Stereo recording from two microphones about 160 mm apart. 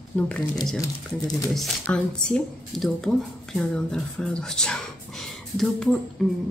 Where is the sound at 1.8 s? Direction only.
5° left (ahead or behind).